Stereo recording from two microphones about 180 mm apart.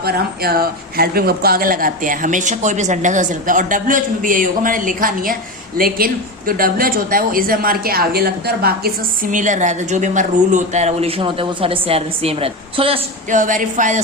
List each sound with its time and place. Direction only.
0.0 s speech: 60° right (ahead or behind); by 13.0 s 30° right (ahead or behind)
13.3 s speech: 45° right (ahead or behind)